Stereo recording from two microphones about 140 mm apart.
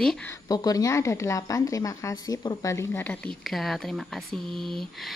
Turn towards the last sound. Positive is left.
turn(degrees=0)  # may be behind; listen again after turning